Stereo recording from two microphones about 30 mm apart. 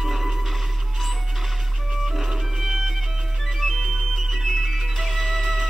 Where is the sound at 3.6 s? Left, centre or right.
Centre.